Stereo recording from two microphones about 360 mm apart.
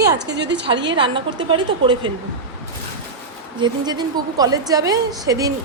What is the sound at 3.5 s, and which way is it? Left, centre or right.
A woman's voice, centre.